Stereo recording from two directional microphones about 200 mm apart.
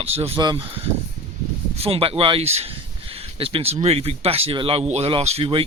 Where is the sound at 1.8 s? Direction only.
30° right (ahead or behind).